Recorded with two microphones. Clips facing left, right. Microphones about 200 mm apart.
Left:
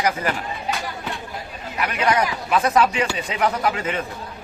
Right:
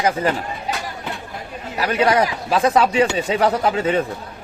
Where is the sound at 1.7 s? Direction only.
35° right (ahead or behind).